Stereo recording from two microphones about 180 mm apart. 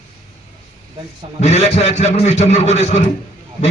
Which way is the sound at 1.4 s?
35° left (ahead or behind).